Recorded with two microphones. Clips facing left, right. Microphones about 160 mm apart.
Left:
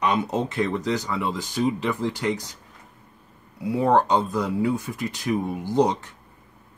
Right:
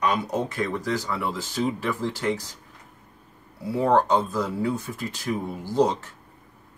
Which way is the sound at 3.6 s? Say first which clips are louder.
Left 1 dB; 15° left (ahead or behind).